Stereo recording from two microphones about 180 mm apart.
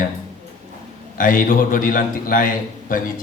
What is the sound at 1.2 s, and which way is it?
A man's voice, 50° left (ahead or behind).